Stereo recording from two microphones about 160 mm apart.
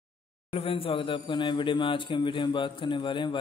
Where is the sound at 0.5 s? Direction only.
35° left (ahead or behind).